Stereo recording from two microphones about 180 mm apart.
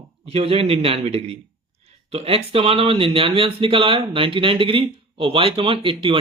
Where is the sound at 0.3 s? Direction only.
35° right (ahead or behind).